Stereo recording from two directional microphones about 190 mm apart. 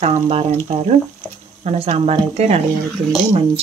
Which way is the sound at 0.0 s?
35° right (ahead or behind).